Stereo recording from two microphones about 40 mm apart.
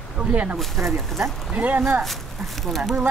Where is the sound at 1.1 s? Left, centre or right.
Centre.